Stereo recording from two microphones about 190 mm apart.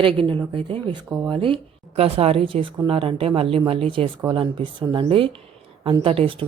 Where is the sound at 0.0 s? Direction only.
25° right (ahead or behind).